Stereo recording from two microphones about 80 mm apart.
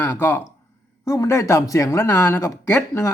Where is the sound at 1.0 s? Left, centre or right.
Left.